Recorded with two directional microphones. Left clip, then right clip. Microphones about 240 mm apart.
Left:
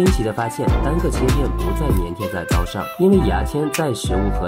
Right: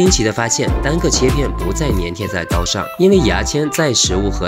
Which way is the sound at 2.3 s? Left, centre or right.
Centre.